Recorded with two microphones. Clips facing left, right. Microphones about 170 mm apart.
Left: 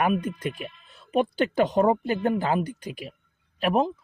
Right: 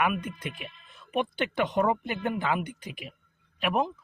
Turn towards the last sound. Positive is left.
turn(degrees=35)  # may be behind; listen again after turning